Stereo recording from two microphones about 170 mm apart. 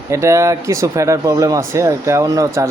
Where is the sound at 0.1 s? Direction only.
15° right (ahead or behind).